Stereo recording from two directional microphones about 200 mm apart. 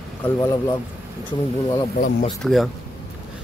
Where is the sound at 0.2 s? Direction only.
15° left (ahead or behind).